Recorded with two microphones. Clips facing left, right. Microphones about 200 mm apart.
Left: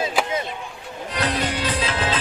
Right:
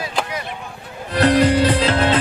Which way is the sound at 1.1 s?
60° right (ahead or behind).